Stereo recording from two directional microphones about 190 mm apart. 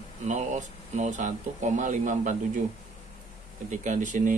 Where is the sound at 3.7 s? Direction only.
40° right (ahead or behind).